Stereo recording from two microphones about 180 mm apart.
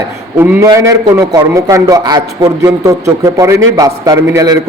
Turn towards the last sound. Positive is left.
turn(degrees=-20)  # may be behind; listen again after turning